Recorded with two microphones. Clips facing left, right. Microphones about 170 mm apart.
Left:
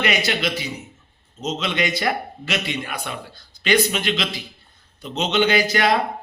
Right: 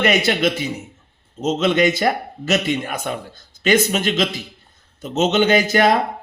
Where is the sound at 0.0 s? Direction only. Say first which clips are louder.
Right 5 dB; 50° right (ahead or behind).